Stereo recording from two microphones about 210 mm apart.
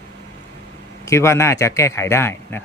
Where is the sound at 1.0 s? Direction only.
15° left (ahead or behind).